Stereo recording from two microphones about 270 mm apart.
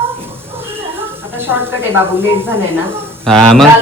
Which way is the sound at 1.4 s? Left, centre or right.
Centre.